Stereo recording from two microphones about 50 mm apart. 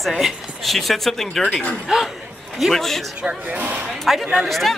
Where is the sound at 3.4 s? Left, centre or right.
Right.